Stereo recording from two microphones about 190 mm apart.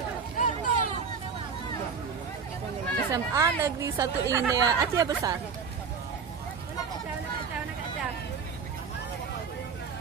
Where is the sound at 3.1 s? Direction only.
15° right (ahead or behind).